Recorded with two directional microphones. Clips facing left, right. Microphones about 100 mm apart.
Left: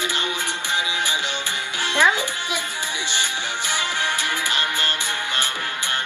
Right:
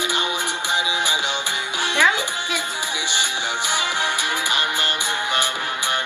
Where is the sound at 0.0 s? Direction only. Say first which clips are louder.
Right 2 dB; 15° right (ahead or behind).